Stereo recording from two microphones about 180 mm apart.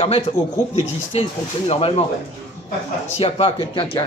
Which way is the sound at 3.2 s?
35° left (ahead or behind).